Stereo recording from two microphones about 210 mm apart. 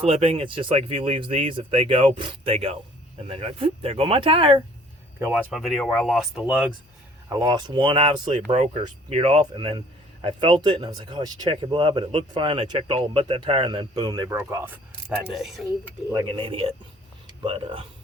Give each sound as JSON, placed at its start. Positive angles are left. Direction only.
{"t": 0.0, "sound": "speech", "side_deg": -25}
{"t": 5.2, "sound": "speech", "side_deg": -5}
{"t": 7.3, "sound": "speech", "side_deg": -15}
{"t": 16.1, "sound": "speech", "side_deg": -25}